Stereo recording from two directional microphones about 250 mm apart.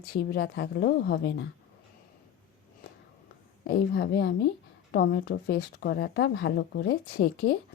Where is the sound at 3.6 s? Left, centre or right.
Left.